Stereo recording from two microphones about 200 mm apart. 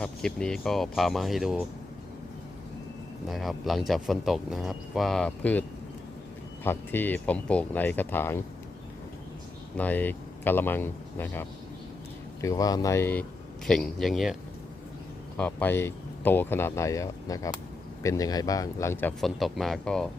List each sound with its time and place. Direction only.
0.0 s speech: 5° left (ahead or behind)
3.2 s speech: centre (ahead or behind)
6.7 s speech: 10° left (ahead or behind)
9.7 s speech: 10° left (ahead or behind)
15.4 s speech: 10° left (ahead or behind)